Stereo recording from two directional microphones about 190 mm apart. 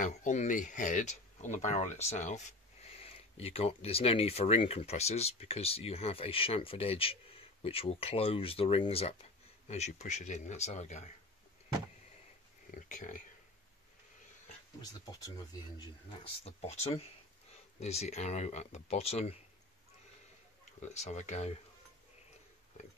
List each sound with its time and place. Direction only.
0.0 s speech: 40° left (ahead or behind)
12.7 s speech: 45° left (ahead or behind)
14.8 s speech: 20° left (ahead or behind)
16.1 s speech: 35° left (ahead or behind)
20.8 s speech: 35° left (ahead or behind)